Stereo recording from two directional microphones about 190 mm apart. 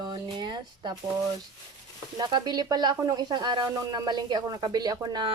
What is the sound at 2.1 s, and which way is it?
Speech, 20° right (ahead or behind).